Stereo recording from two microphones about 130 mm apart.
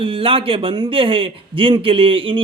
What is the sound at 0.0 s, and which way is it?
A man's voice, 45° right (ahead or behind).